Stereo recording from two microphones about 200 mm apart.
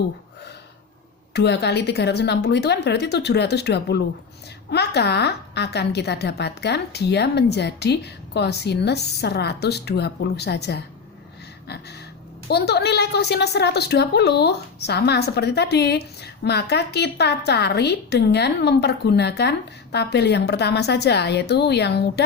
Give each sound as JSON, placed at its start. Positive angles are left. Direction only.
{"t": 1.3, "sound": "a woman's voice", "side_deg": 55}
{"t": 11.7, "sound": "a sound", "side_deg": 55}
{"t": 12.5, "sound": "a woman's voice", "side_deg": 55}